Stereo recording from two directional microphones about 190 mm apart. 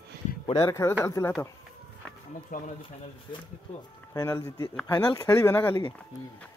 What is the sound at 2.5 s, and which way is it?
Speech, 40° left (ahead or behind).